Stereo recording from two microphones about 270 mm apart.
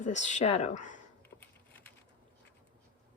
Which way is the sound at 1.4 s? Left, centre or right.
Centre.